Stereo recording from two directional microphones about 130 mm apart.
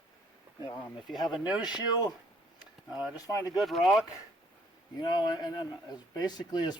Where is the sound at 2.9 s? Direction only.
5° right (ahead or behind).